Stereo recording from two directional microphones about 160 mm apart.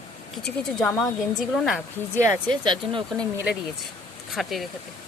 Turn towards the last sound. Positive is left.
turn(degrees=0)  # may be behind; listen again after turning